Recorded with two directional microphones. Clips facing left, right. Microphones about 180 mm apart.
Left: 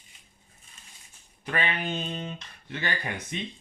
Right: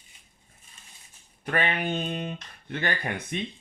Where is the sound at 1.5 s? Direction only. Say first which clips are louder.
Right 3 dB; 55° right (ahead or behind).